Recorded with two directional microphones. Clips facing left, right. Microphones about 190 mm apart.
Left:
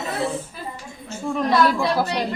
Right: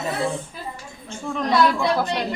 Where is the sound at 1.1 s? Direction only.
5° left (ahead or behind).